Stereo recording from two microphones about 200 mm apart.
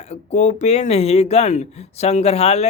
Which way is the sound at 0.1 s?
35° left (ahead or behind).